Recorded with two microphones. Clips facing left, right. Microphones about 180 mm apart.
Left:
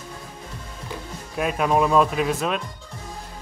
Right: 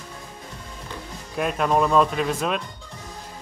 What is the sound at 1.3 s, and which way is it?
Speech, 5° left (ahead or behind).